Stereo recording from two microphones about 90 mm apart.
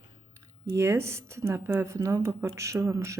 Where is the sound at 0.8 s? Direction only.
30° right (ahead or behind).